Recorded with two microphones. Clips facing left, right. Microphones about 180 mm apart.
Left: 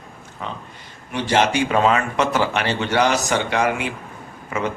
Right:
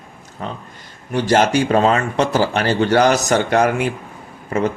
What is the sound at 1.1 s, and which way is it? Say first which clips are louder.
Speech: right 4 dB; 40° right (ahead or behind).